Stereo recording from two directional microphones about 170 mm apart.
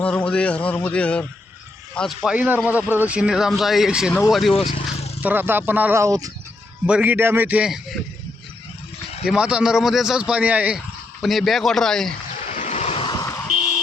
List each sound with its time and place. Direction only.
0.0 s a man's voice: 5° left (ahead or behind)
4.7 s vehicle: 40° left (ahead or behind)
5.2 s speech: 10° right (ahead or behind)
6.8 s speech: 10° right (ahead or behind)
9.2 s speech: 5° right (ahead or behind)
12.5 s vehicle: 40° left (ahead or behind)